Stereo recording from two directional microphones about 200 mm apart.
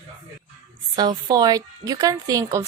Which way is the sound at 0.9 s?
20° right (ahead or behind).